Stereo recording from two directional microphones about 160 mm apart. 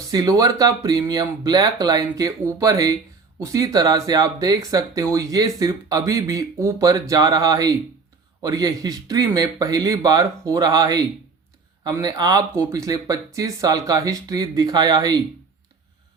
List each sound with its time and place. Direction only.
0.1 s speech: 20° right (ahead or behind)